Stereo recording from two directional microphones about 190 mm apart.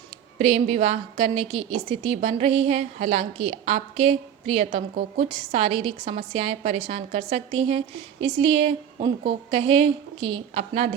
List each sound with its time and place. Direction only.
0.3 s a woman's voice: 35° right (ahead or behind)